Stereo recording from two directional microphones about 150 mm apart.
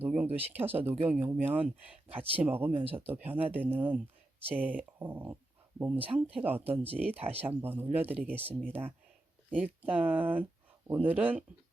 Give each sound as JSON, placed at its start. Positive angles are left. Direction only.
{"t": 0.0, "sound": "speech", "side_deg": -10}
{"t": 7.2, "sound": "speech", "side_deg": -40}
{"t": 7.4, "sound": "speech", "side_deg": -15}